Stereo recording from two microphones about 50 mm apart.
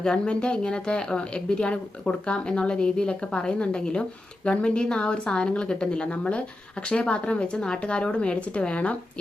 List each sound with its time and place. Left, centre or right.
0.0 s speech: centre